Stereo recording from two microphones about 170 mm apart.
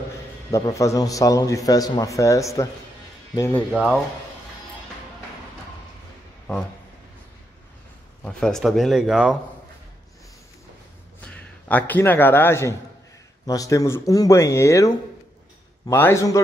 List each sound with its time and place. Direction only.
0.5 s a man's voice: 20° left (ahead or behind)
8.2 s speech: 5° left (ahead or behind)
11.1 s a man's voice: 10° left (ahead or behind)
15.9 s a man's voice: 15° left (ahead or behind)